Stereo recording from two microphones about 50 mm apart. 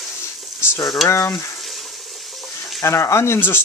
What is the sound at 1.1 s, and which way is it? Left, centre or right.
Speech, left.